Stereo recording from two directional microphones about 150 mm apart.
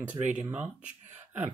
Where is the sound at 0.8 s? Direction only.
55° right (ahead or behind).